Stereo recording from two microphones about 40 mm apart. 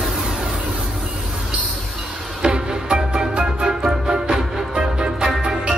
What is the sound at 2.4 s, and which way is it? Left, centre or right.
Music, right.